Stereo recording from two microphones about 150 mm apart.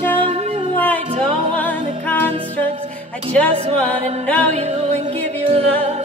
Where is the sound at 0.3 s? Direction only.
50° right (ahead or behind).